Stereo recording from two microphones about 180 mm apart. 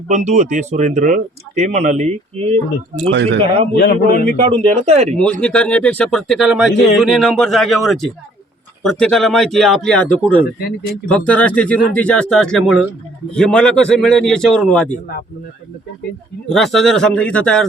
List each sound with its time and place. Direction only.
0.1 s speech: 40° right (ahead or behind)
3.0 s speech: 80° right
3.8 s a man's voice: 60° left (ahead or behind)
4.4 s speech: 35° right (ahead or behind)
5.1 s a man's voice: 5° left (ahead or behind)
10.6 s a man's voice: 65° left (ahead or behind)
11.1 s a man's voice: 5° left (ahead or behind)
16.5 s a man's voice: centre (ahead or behind)